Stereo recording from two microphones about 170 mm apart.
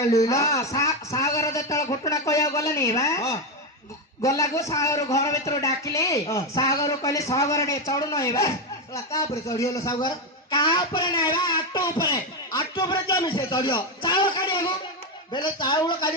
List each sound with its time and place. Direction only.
0.3 s a man's voice: 20° left (ahead or behind)